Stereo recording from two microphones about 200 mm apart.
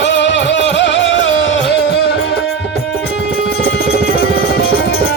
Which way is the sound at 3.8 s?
55° left (ahead or behind).